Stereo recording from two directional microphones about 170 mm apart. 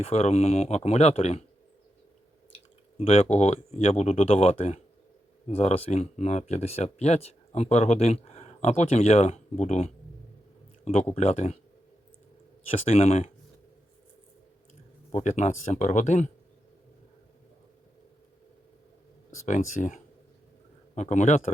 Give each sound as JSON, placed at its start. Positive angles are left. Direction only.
{"t": 0.0, "sound": "speech", "side_deg": 35}
{"t": 3.0, "sound": "speech", "side_deg": 35}
{"t": 11.1, "sound": "speech", "side_deg": 40}
{"t": 12.7, "sound": "speech", "side_deg": 40}
{"t": 15.1, "sound": "speech", "side_deg": 45}
{"t": 19.5, "sound": "speech", "side_deg": 45}